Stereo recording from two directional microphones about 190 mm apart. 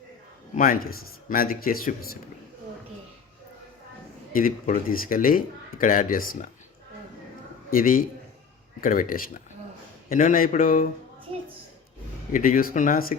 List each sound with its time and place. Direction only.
0.5 s speech: 45° left (ahead or behind)
4.3 s speech: 45° left (ahead or behind)
7.7 s speech: 50° left (ahead or behind)
11.3 s a sound: 25° right (ahead or behind)
12.3 s speech: 45° left (ahead or behind)